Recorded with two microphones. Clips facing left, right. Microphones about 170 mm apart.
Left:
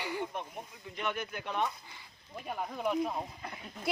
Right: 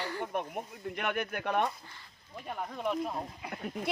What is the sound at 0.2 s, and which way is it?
Speech, 55° right (ahead or behind).